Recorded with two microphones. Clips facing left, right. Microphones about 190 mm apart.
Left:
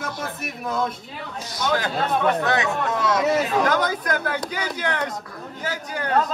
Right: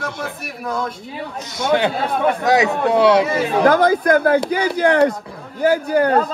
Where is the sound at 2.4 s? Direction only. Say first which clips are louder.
Right 7 dB; 35° right (ahead or behind).